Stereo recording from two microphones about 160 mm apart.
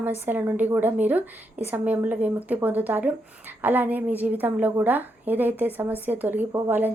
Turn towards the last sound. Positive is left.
turn(degrees=-10)  # may be behind; listen again after turning